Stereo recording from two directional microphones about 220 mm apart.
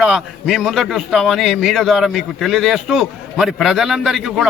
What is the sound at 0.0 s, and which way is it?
A man's voice, centre (ahead or behind).